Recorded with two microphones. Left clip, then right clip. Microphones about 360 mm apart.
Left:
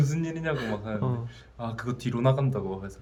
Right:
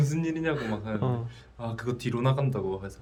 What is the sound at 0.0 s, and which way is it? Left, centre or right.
A man's voice, centre.